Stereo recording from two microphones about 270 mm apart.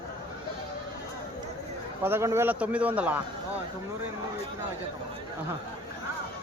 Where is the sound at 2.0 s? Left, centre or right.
Centre.